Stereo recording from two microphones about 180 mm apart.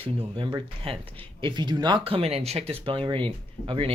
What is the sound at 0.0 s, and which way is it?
Speech, 30° right (ahead or behind).